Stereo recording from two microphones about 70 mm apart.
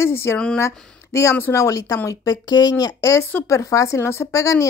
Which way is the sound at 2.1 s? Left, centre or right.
Left.